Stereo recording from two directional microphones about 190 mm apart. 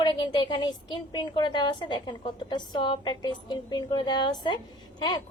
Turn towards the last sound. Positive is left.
turn(degrees=20)  # may be behind; listen again after turning